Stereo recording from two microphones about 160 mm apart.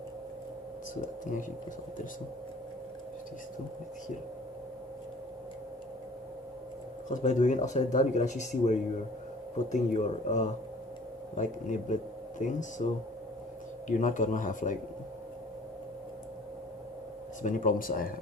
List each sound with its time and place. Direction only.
7.1 s speech: 50° left (ahead or behind)
17.4 s speech: 55° left (ahead or behind)